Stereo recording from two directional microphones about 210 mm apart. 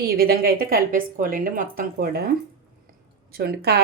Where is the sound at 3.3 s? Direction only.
50° right (ahead or behind).